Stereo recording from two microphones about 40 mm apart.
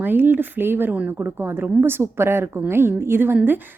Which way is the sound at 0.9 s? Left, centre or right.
Right.